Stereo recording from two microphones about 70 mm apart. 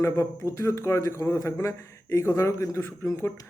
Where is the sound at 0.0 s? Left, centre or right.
Left.